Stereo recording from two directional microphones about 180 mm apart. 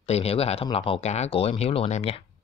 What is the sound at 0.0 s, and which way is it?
Speech, 35° left (ahead or behind).